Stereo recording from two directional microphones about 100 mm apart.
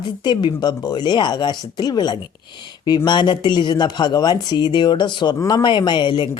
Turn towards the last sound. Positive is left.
turn(degrees=60)  # may be behind; listen again after turning